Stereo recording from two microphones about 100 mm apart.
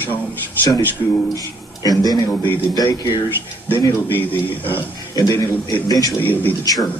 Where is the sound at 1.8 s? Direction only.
40° left (ahead or behind).